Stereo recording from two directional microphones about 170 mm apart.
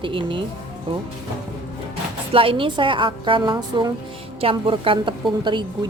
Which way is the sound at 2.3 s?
30° right (ahead or behind).